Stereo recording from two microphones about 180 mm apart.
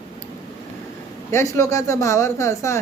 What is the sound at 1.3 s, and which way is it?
Speech, 15° left (ahead or behind).